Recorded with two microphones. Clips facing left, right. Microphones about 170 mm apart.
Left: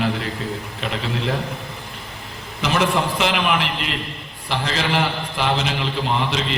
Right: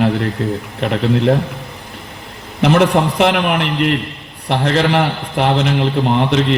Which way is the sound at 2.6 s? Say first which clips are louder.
Right 8 dB; 65° right (ahead or behind).